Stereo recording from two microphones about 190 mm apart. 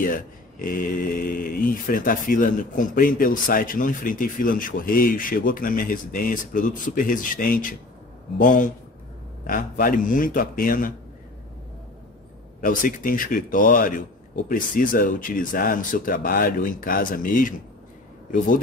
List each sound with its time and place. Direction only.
0.0 s speech: 45° left (ahead or behind)
12.5 s speech: 45° left (ahead or behind)